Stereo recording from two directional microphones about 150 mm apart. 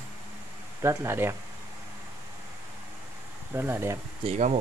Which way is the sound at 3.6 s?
15° right (ahead or behind).